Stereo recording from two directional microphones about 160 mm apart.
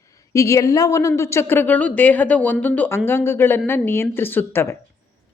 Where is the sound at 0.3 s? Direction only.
20° left (ahead or behind).